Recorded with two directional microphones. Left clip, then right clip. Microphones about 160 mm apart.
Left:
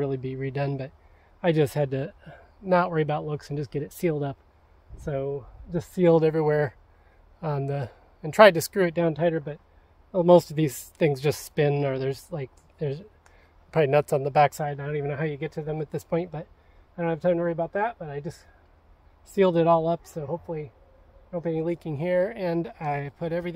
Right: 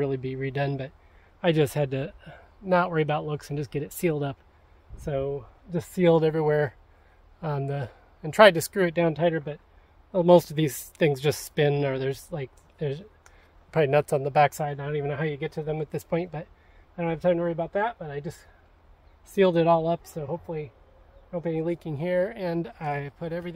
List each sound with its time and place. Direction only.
0.0 s speech: 20° left (ahead or behind); by 23.5 s 45° left (ahead or behind)